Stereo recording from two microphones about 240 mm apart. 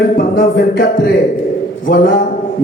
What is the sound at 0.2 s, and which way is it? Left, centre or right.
A man's voice, left.